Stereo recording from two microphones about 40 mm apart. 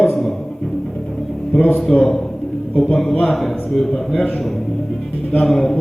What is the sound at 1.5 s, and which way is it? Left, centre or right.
Speech, left.